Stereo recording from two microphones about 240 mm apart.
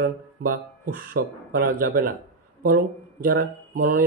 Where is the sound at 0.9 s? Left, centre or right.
Right.